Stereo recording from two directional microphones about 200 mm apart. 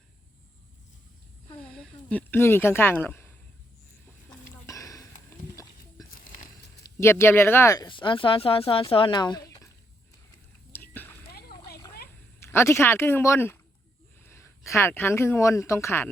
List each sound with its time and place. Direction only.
1.6 s a sound: 5° left (ahead or behind)
4.3 s sniff: 15° left (ahead or behind)
6.8 s speech: 15° left (ahead or behind)
10.7 s whispering: 10° left (ahead or behind)
12.4 s speech: 15° left (ahead or behind)